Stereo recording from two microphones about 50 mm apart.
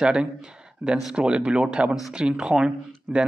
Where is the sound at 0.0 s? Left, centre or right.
Centre.